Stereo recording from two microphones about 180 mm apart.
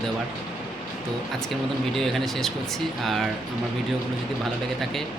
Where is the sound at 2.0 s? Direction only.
Centre (ahead or behind).